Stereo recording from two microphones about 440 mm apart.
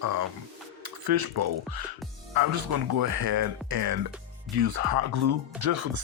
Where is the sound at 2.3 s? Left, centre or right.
Right.